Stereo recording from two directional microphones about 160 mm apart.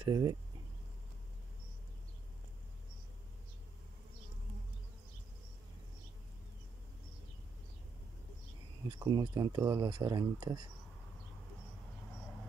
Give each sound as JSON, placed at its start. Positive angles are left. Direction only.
{"t": 0.0, "sound": "speech", "side_deg": -25}
{"t": 8.8, "sound": "speech", "side_deg": -25}